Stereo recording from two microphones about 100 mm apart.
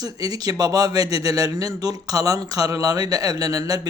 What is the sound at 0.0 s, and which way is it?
Speech, 40° right (ahead or behind).